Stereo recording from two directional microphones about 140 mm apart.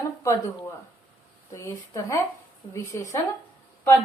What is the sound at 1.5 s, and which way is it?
A woman's voice, 20° left (ahead or behind).